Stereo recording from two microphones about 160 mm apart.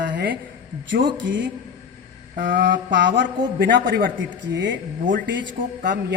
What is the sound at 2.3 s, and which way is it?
A man's voice, 90° right.